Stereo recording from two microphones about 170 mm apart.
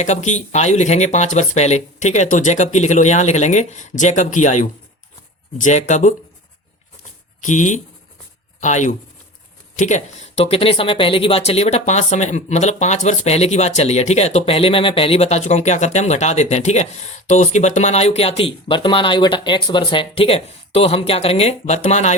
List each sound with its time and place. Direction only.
0.0 s speech: 45° left (ahead or behind)
7.4 s speech: 45° left (ahead or behind)